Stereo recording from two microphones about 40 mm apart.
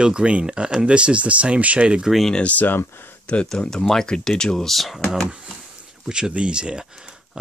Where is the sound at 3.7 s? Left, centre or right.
Centre.